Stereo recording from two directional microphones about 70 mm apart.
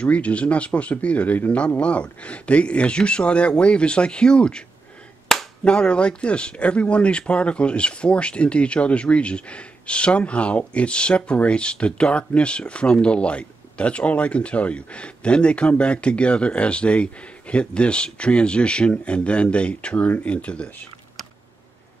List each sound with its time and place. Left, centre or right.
0.0 s speech: centre